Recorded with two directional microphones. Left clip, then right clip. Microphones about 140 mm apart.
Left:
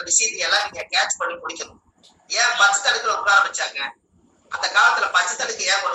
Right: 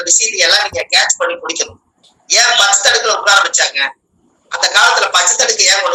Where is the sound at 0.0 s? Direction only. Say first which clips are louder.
Right 9 dB; 60° right (ahead or behind).